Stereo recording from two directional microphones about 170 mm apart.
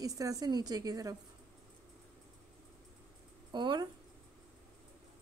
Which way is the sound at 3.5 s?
25° right (ahead or behind).